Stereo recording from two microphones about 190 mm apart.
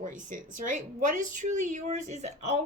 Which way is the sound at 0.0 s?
40° right (ahead or behind).